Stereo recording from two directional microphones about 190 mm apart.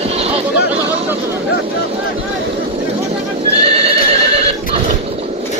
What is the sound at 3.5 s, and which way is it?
Neigh, 30° right (ahead or behind).